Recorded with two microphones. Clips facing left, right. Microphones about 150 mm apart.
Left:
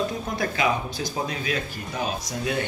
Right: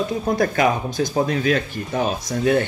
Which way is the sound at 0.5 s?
50° right (ahead or behind).